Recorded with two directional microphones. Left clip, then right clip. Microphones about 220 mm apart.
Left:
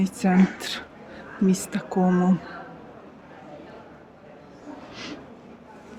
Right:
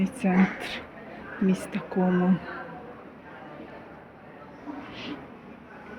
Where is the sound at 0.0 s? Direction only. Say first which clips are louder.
Left 3 dB; 20° left (ahead or behind).